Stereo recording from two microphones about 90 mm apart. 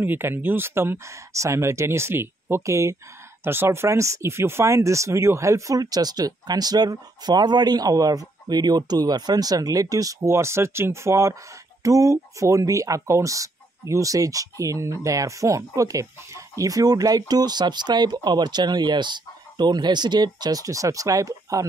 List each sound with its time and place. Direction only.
0.0 s speech: 25° right (ahead or behind); by 21.6 s 40° right (ahead or behind)